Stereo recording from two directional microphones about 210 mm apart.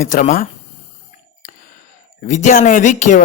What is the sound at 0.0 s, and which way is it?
Speech, 40° left (ahead or behind).